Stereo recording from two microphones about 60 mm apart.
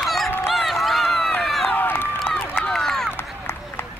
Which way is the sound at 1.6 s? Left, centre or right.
Left.